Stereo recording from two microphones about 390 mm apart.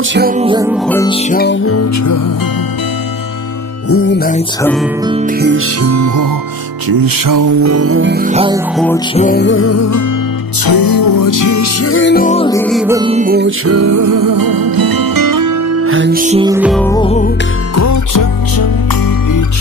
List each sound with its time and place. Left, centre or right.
0.1 s music: right
0.8 s music: centre; by 1.9 s left
3.9 s music: left
5.0 s music: centre
5.8 s music: right
6.9 s music: right; by 8.5 s centre
8.7 s music: centre
9.1 s music: left
10.6 s music: left; by 13.5 s right
13.7 s music: right
15.8 s music: right; by 17.3 s centre
17.7 s music: left